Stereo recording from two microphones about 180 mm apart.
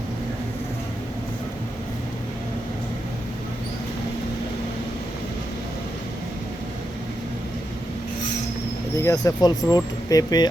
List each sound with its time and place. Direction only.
9.0 s speech: 20° left (ahead or behind)